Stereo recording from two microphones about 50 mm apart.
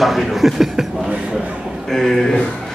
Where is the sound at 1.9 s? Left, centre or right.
Centre.